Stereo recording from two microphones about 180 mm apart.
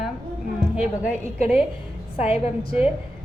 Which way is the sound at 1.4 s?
35° left (ahead or behind).